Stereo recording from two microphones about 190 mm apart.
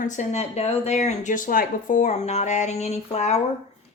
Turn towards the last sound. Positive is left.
turn(degrees=35)  # may be behind; listen again after turning